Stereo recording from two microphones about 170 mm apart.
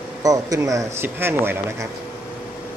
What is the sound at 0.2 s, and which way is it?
Speech, 20° right (ahead or behind).